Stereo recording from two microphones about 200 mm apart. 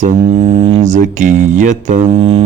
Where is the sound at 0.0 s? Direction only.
30° right (ahead or behind).